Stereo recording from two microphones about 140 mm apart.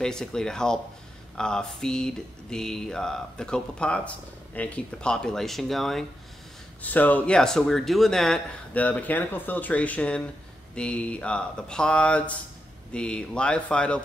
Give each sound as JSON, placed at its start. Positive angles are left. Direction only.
{"t": 0.0, "sound": "speech", "side_deg": 5}